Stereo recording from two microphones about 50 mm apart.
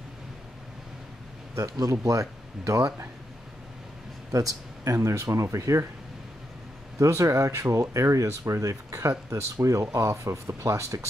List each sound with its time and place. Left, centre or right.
1.5 s speech: right
4.8 s speech: right
7.0 s speech: right